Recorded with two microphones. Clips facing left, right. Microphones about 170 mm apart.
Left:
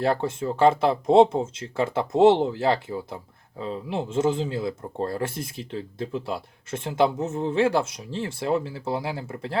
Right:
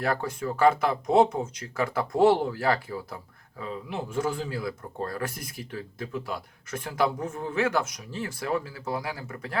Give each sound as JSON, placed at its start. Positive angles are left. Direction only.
{"t": 0.0, "sound": "speech", "side_deg": 25}